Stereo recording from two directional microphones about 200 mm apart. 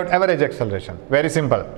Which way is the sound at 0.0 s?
10° right (ahead or behind).